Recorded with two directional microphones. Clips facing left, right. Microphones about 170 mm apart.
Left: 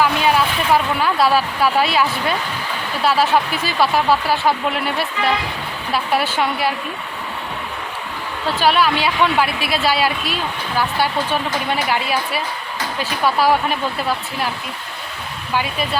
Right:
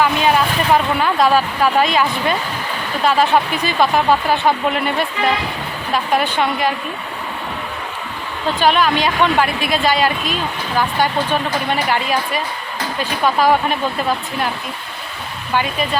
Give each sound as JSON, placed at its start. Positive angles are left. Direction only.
{"t": 0.0, "sound": "speech", "side_deg": 5}
{"t": 8.5, "sound": "speech", "side_deg": 5}
{"t": 15.5, "sound": "speech", "side_deg": 5}